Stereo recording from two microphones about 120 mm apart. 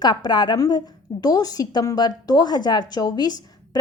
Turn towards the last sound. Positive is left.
turn(degrees=35)  # may be behind; listen again after turning